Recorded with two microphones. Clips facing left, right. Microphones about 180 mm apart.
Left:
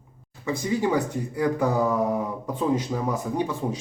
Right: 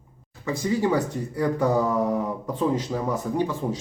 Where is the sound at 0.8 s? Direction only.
10° left (ahead or behind).